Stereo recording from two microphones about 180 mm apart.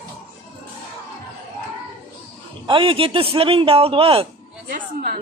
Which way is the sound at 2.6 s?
30° right (ahead or behind).